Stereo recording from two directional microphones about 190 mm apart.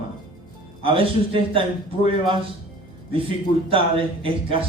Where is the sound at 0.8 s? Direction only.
30° right (ahead or behind).